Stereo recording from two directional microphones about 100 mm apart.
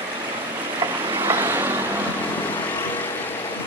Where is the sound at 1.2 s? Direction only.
25° right (ahead or behind).